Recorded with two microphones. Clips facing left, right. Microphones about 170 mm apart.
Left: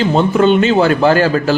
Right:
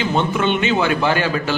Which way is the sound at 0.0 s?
35° left (ahead or behind).